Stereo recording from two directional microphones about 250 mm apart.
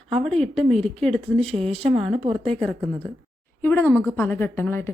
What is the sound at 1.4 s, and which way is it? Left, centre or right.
Speech, right.